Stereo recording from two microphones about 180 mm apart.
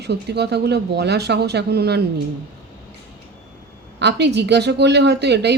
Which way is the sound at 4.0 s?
70° right (ahead or behind).